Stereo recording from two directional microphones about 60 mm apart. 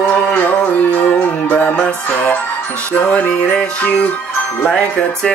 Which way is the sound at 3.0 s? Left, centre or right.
Left.